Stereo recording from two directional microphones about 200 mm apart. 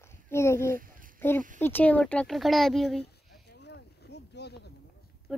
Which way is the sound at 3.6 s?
60° left (ahead or behind).